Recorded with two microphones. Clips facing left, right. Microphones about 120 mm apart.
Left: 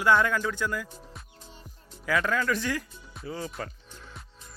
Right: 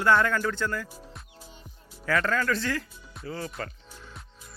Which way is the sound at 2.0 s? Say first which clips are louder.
Right 1 dB; 10° left (ahead or behind).